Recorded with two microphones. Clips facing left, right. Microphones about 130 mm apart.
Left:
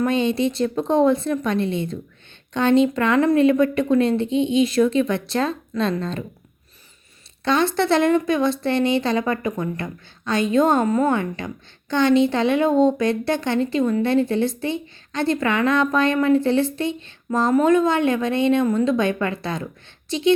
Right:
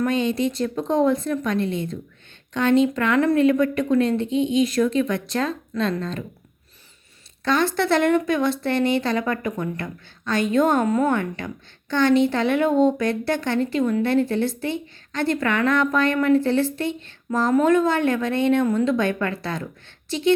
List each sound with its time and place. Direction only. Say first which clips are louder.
0.0 s speech: left 2 dB; 25° left (ahead or behind)
7.4 s a woman's voice: left 2 dB; 20° left (ahead or behind)